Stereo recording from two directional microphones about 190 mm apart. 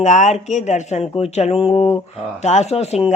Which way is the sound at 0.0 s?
40° left (ahead or behind).